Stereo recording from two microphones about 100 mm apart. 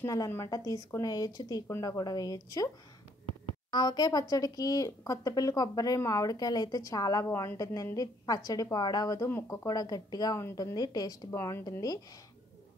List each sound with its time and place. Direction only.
0.0 s speech: 35° left (ahead or behind)
3.7 s speech: 45° left (ahead or behind)
9.3 s speech: 25° left (ahead or behind)
9.7 s speech: 40° left (ahead or behind)
11.2 s speech: 30° left (ahead or behind)